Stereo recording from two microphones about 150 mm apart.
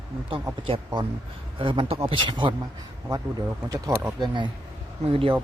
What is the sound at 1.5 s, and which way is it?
A man's voice, 40° right (ahead or behind).